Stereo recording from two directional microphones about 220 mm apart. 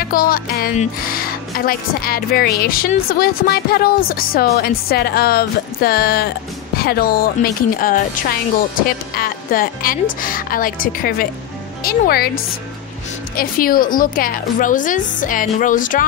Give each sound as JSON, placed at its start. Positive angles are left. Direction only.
{"t": 0.0, "sound": "speech", "side_deg": 40}
{"t": 13.4, "sound": "speech", "side_deg": 40}